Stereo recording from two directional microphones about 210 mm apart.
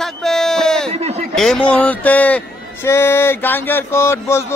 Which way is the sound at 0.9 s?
30° right (ahead or behind).